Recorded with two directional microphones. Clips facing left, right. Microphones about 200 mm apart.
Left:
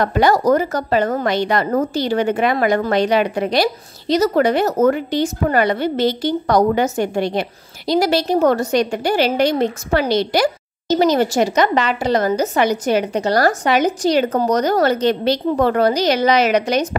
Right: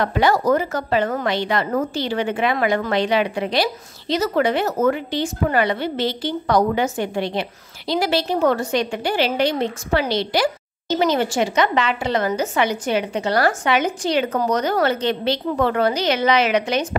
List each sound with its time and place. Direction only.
0.0 s a woman's voice: 45° left (ahead or behind)